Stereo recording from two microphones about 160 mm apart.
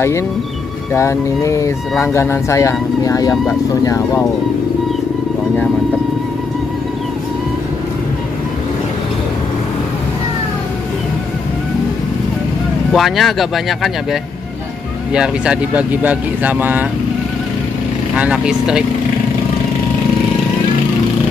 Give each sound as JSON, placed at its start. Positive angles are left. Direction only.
{"t": 0.9, "sound": "speech", "side_deg": 20}
{"t": 12.9, "sound": "speech", "side_deg": 0}
{"t": 15.1, "sound": "speech", "side_deg": -5}
{"t": 18.1, "sound": "speech", "side_deg": -5}